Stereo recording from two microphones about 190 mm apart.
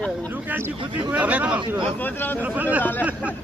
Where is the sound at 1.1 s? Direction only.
5° right (ahead or behind).